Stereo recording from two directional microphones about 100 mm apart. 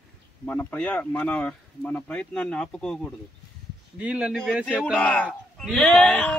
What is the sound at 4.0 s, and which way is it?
Speech, 10° right (ahead or behind).